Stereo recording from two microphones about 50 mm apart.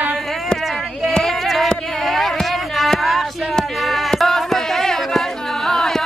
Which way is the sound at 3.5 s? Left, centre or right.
Centre.